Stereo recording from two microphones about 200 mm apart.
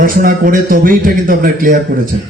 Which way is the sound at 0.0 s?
45° right (ahead or behind).